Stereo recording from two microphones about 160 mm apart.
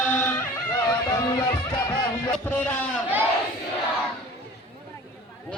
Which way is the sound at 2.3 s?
10° left (ahead or behind).